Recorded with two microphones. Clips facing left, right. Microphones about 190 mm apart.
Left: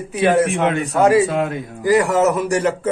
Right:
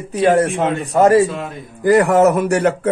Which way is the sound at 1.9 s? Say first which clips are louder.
Right 3 dB; 55° right (ahead or behind).